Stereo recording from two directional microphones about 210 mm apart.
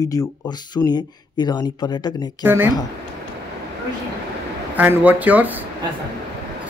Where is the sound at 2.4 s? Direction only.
10° right (ahead or behind).